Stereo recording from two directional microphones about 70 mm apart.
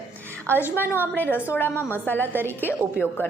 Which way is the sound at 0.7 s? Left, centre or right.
Left.